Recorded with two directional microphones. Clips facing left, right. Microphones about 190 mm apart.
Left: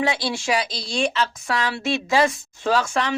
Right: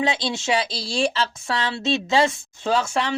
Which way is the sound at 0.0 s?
20° right (ahead or behind).